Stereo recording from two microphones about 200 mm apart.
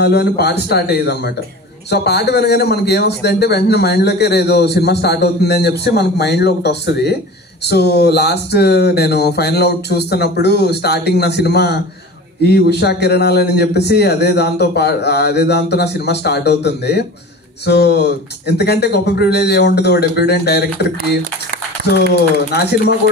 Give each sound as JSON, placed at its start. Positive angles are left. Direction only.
{"t": 0.0, "sound": "a man's voice", "side_deg": 55}
{"t": 22.5, "sound": "a man's voice", "side_deg": 55}